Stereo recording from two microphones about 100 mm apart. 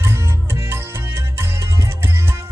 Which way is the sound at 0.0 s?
25° right (ahead or behind).